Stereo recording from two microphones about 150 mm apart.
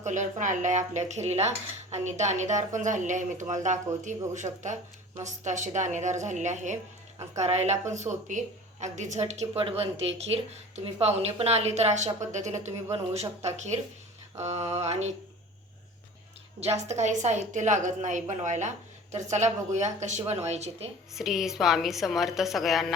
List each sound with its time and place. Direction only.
0.0 s speech: 55° right (ahead or behind)
16.9 s speech: 50° right (ahead or behind)
21.1 s a woman's voice: centre (ahead or behind)